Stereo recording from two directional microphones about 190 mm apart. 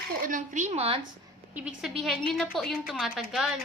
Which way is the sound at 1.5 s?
5° right (ahead or behind).